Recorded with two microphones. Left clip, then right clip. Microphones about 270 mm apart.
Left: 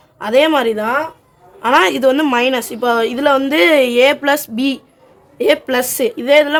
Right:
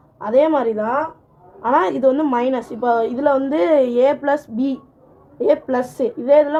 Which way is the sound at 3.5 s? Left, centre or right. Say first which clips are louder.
Left 4 dB; left.